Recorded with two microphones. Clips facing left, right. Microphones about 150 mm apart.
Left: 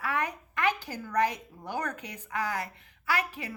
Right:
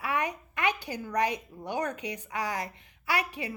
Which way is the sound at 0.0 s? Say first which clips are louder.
Right 1 dB; 15° right (ahead or behind).